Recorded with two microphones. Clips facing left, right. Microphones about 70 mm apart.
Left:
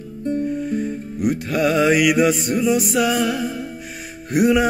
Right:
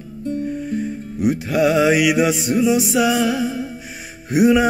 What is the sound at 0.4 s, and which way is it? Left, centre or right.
Music, centre.